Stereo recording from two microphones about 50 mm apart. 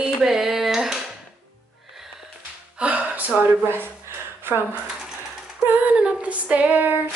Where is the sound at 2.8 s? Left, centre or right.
Right.